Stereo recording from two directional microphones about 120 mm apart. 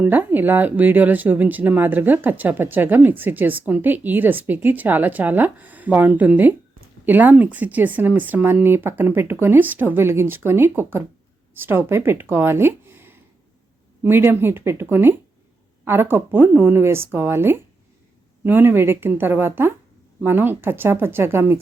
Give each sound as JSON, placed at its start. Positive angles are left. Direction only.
{"t": 0.0, "sound": "speech", "side_deg": -15}